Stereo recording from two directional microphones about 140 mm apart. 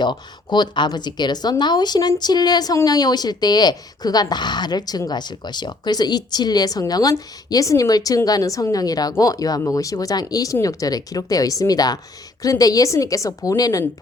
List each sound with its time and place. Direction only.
0.0 s speech: 30° left (ahead or behind)